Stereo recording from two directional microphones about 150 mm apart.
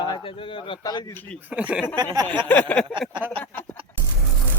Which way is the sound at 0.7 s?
30° left (ahead or behind).